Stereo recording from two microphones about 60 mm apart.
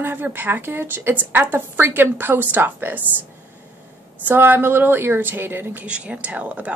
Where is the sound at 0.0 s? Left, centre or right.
Right.